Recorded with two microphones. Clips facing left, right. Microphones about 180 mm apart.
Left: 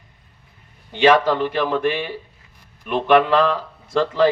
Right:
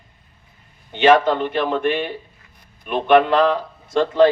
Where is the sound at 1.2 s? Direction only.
25° right (ahead or behind).